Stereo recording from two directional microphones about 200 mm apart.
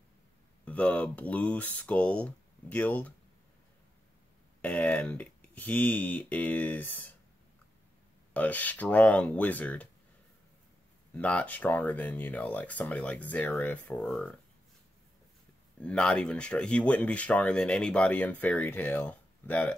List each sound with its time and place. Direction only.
0.7 s speech: 5° left (ahead or behind)
4.6 s speech: 5° left (ahead or behind)
8.3 s speech: 10° left (ahead or behind)
11.1 s speech: 5° left (ahead or behind)
15.8 s speech: 5° left (ahead or behind)